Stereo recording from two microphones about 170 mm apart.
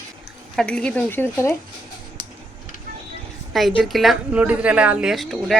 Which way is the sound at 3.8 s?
Centre (ahead or behind).